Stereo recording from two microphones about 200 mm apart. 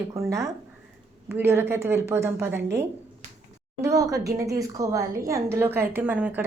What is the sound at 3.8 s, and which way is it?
A woman's voice, 15° right (ahead or behind).